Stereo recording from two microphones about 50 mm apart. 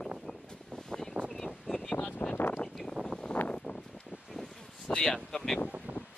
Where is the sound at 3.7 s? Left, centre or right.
Left.